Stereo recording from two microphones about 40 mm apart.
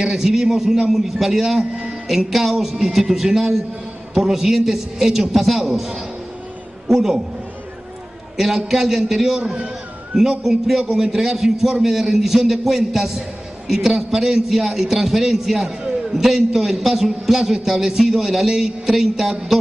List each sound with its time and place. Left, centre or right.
0.0 s a man's voice: centre
1.6 s a man's voice: right
2.0 s a man's voice: centre
8.4 s a man's voice: centre
9.4 s a man's voice: right
10.8 s a man's voice: right
11.1 s a man's voice: centre